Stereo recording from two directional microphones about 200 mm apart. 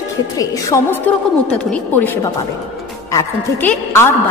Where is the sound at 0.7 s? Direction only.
15° left (ahead or behind).